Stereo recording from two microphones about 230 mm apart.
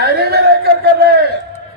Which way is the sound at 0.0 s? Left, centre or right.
Right.